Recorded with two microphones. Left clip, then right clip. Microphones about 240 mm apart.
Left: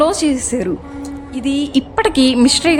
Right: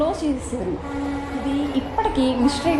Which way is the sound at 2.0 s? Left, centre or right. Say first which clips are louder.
Left 7 dB; left.